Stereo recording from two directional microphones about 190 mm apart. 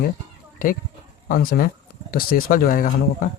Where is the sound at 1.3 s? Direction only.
50° left (ahead or behind).